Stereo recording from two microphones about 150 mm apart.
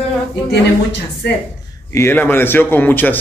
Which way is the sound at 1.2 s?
90° left.